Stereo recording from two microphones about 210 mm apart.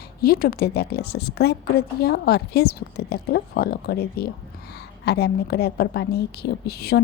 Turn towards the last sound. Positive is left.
turn(degrees=50)  # may be behind; listen again after turning